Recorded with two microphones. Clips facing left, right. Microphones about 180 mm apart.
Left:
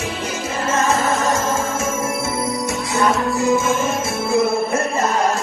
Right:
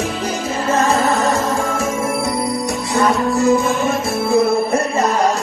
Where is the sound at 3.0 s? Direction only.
Centre (ahead or behind).